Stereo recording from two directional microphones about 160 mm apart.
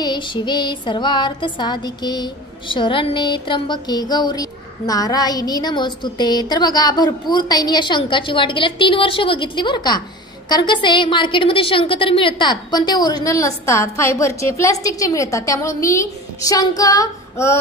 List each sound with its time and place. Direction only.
0.0 s music: 30° left (ahead or behind)